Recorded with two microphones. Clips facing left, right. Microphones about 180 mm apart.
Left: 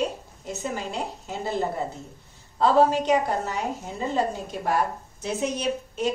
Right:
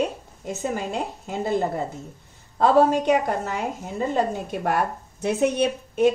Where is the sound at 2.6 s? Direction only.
50° right (ahead or behind).